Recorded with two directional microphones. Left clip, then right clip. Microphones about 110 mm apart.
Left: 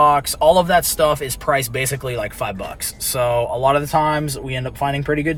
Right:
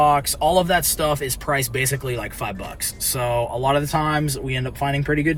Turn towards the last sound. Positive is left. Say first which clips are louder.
# left 1 dB
turn(degrees=30)  # may be behind; listen again after turning